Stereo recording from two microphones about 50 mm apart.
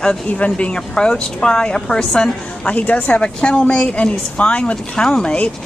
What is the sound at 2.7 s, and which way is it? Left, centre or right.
Speech, left.